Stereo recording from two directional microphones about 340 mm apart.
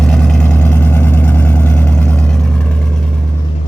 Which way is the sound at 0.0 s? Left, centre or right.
Centre.